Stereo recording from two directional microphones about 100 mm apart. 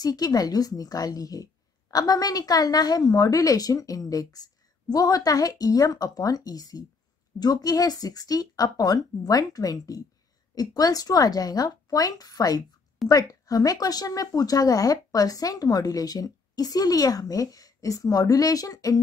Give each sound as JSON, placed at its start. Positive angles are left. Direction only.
{"t": 0.0, "sound": "a woman's voice", "side_deg": 40}